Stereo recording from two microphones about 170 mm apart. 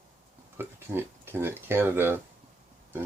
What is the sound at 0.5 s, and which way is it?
Speech, 15° right (ahead or behind).